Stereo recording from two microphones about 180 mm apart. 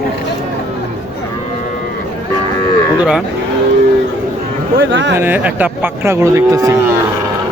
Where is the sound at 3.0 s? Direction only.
5° right (ahead or behind).